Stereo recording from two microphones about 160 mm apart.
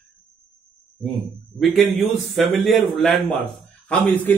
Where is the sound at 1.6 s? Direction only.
Centre (ahead or behind).